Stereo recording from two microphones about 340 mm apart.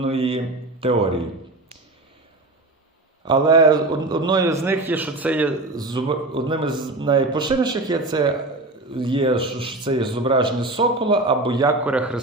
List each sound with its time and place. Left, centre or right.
0.0 s a man's voice: centre
3.2 s a man's voice: centre